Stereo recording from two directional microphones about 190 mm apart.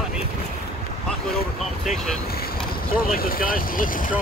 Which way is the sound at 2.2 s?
55° left (ahead or behind).